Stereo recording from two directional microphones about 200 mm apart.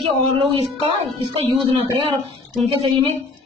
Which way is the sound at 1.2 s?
25° right (ahead or behind).